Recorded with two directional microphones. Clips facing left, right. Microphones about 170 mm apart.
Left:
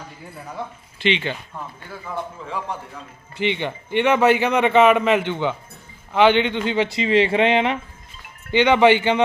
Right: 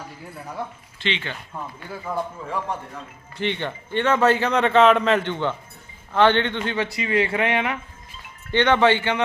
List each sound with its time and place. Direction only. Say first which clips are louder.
0.9 s a man's voice: left 6 dB; 15° left (ahead or behind)
3.3 s a man's voice: left 3 dB; 15° left (ahead or behind)
6.7 s speech: left 5 dB; 25° left (ahead or behind)
8.5 s a man's voice: left 3 dB; 10° left (ahead or behind)